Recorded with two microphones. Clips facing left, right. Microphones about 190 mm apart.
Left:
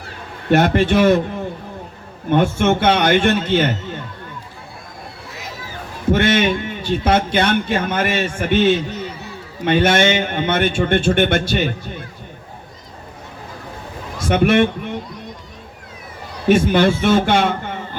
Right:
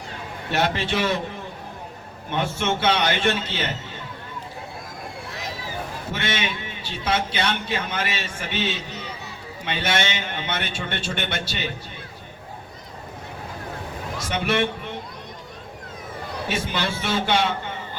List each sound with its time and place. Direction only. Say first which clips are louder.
0.5 s a man's voice: left 9 dB; 50° left (ahead or behind)
2.3 s a man's voice: left 9 dB; 50° left (ahead or behind)
6.1 s a man's voice: left 14 dB; 50° left (ahead or behind)
14.3 s a man's voice: left 9 dB; 55° left (ahead or behind)
16.5 s a man's voice: left 14 dB; 50° left (ahead or behind)